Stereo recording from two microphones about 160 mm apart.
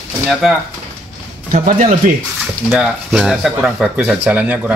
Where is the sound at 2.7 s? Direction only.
5° right (ahead or behind).